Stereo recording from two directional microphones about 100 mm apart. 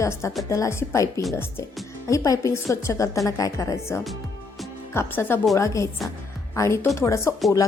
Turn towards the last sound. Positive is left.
turn(degrees=25)  # may be behind; listen again after turning